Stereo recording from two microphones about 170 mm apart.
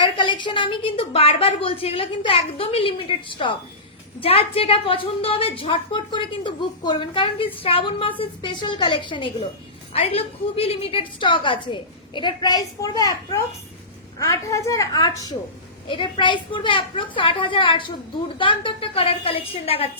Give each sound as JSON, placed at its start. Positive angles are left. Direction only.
{"t": 0.0, "sound": "a woman's voice", "side_deg": 30}